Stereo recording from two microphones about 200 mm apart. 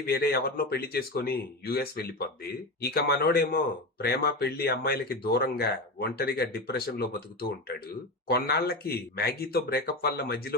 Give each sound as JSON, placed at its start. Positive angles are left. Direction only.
{"t": 0.0, "sound": "speech", "side_deg": 50}